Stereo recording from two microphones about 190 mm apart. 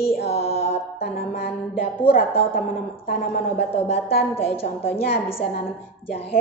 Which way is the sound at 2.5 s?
50° left (ahead or behind).